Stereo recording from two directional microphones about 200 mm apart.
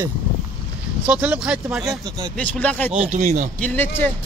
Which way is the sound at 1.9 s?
15° right (ahead or behind).